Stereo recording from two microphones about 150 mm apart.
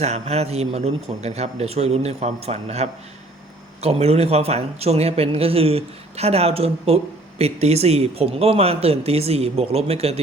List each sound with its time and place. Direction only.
0.0 s speech: 45° right (ahead or behind)